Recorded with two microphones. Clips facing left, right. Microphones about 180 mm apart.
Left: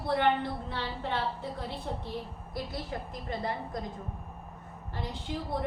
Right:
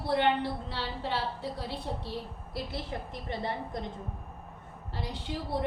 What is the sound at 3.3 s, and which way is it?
Speech, 30° right (ahead or behind).